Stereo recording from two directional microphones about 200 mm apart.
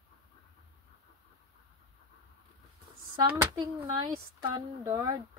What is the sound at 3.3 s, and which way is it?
Speech, 15° right (ahead or behind).